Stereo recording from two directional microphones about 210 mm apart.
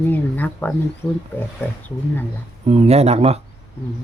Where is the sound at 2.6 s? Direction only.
30° right (ahead or behind).